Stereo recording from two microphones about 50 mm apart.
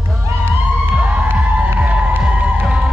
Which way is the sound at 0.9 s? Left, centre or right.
Right.